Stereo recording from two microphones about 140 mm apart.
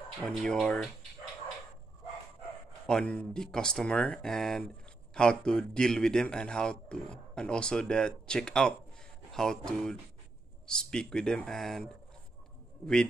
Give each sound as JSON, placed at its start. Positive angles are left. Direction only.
{"t": 0.2, "sound": "a man's voice", "side_deg": 5}
{"t": 2.9, "sound": "a man's voice", "side_deg": 10}
{"t": 10.7, "sound": "a man's voice", "side_deg": 5}